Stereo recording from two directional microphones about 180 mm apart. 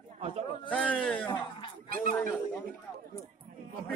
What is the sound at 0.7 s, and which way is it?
Speech, 5° left (ahead or behind).